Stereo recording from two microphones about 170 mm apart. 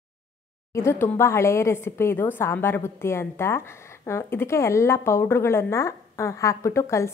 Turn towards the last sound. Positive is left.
turn(degrees=15)  # may be behind; listen again after turning